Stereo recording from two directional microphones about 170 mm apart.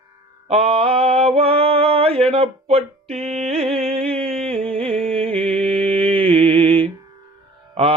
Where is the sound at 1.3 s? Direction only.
35° right (ahead or behind).